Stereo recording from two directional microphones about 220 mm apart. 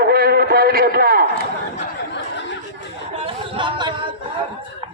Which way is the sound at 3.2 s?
25° right (ahead or behind).